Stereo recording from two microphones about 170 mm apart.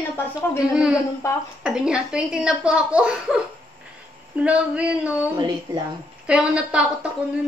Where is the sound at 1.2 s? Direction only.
15° left (ahead or behind).